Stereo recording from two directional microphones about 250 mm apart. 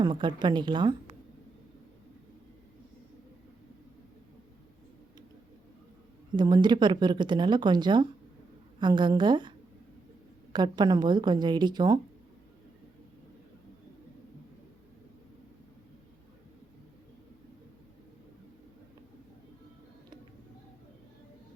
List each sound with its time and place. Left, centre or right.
0.0 s speech: centre
6.3 s speech: centre
10.5 s speech: centre